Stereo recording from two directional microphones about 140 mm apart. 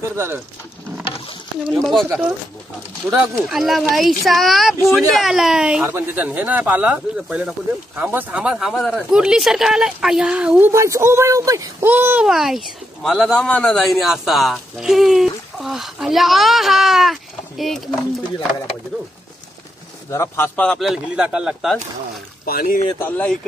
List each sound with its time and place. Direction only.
0.1 s speech: 20° right (ahead or behind)
1.7 s speech: centre (ahead or behind)
2.0 s speech: 10° right (ahead or behind)
3.4 s speech: centre (ahead or behind)
10.7 s speech: 20° right (ahead or behind)
11.9 s speech: 15° right (ahead or behind)
12.3 s speech: centre (ahead or behind)
20.1 s a man's voice: 20° left (ahead or behind)
20.6 s speech: centre (ahead or behind)
22.4 s speech: 90° left
22.9 s a man's voice: 10° left (ahead or behind)